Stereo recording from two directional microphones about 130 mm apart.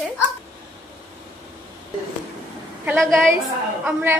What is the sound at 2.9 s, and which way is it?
Speech, centre (ahead or behind).